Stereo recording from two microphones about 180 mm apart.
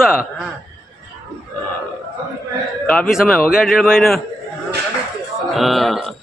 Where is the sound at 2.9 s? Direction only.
Centre (ahead or behind).